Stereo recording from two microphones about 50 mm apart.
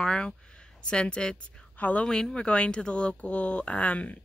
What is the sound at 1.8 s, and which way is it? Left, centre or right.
Speech, left.